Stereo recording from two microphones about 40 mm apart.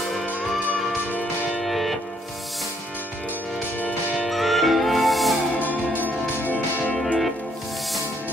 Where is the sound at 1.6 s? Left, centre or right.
Centre.